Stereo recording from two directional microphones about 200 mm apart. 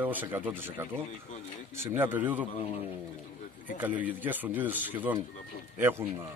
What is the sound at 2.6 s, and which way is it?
Speech, 30° left (ahead or behind).